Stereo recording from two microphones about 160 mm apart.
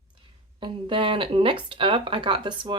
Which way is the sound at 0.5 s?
30° right (ahead or behind).